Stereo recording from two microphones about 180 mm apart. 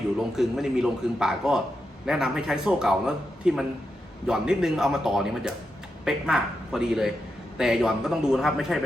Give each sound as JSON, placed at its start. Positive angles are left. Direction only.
{"t": 0.2, "sound": "a man's voice", "side_deg": 0}